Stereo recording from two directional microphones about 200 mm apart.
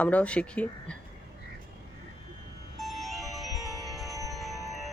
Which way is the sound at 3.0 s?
Centre (ahead or behind).